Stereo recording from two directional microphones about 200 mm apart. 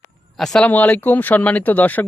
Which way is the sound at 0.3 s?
Centre (ahead or behind).